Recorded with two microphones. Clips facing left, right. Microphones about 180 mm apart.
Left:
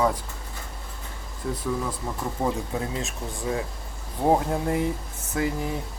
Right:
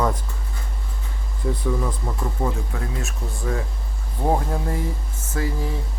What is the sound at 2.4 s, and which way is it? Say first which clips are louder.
Speech: left 2 dB; 20° left (ahead or behind).